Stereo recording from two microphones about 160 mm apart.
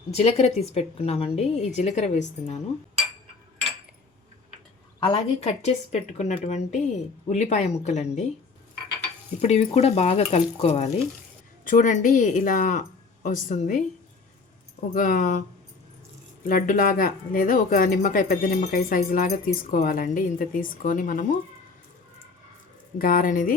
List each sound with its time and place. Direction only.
0.1 s a woman's voice: 40° left (ahead or behind)
4.9 s a woman's voice: 30° left (ahead or behind)
5.4 s a woman's voice: 45° left (ahead or behind)
9.4 s speech: 40° left (ahead or behind)
11.6 s a woman's voice: 55° left (ahead or behind)
14.9 s a woman's voice: 55° left (ahead or behind)
16.5 s speech: 60° left (ahead or behind)
23.0 s speech: 60° left (ahead or behind)